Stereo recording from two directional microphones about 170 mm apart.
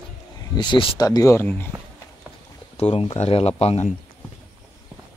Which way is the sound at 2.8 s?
35° left (ahead or behind).